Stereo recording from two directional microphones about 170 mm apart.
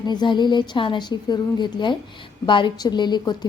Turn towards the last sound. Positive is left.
turn(degrees=25)  # may be behind; listen again after turning